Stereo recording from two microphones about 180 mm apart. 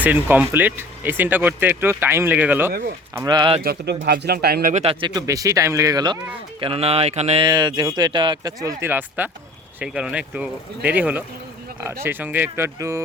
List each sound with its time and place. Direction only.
0.0 s speech: 10° right (ahead or behind)
3.2 s speech: 25° right (ahead or behind)
3.6 s speech: 60° right (ahead or behind)
4.7 s speech: 35° right (ahead or behind)
6.6 s speech: 30° right (ahead or behind)
7.4 s speech: 25° right (ahead or behind)